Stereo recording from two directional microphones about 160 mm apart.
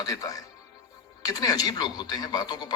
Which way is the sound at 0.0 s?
20° left (ahead or behind).